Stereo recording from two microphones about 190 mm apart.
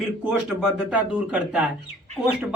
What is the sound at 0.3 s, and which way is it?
Speech, 5° right (ahead or behind).